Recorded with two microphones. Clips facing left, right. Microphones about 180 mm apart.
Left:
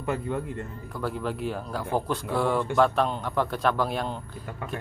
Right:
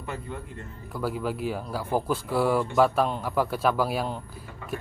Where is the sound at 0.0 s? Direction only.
55° left (ahead or behind).